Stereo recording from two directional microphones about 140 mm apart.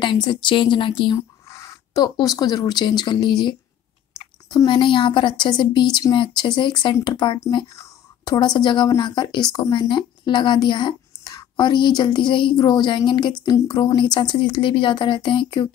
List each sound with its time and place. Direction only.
0.0 s a woman's voice: 35° left (ahead or behind)